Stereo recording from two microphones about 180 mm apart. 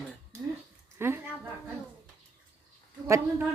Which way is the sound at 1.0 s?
10° right (ahead or behind).